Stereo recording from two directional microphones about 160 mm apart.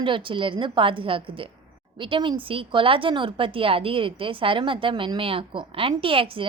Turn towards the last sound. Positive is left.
turn(degrees=-35)  # may be behind; listen again after turning